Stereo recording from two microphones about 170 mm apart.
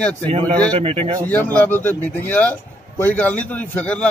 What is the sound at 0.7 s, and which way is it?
Speech, 35° right (ahead or behind).